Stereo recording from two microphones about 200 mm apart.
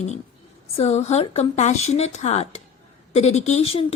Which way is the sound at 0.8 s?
30° left (ahead or behind).